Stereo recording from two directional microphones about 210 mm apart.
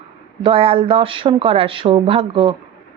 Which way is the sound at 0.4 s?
25° right (ahead or behind).